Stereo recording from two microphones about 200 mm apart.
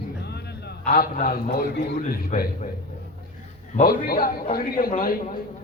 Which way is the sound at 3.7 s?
45° left (ahead or behind).